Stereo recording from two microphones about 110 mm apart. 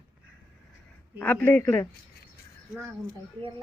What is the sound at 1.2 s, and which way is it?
Speech, 15° left (ahead or behind).